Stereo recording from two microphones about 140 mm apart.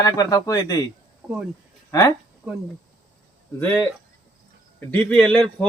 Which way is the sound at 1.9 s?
25° left (ahead or behind).